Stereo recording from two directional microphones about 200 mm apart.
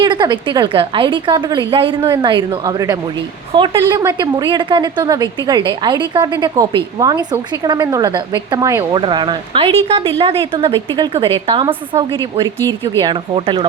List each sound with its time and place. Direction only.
0.0 s a woman's voice: 20° right (ahead or behind)